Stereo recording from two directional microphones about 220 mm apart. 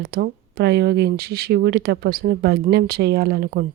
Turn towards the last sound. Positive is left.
turn(degrees=-45)  # may be behind; listen again after turning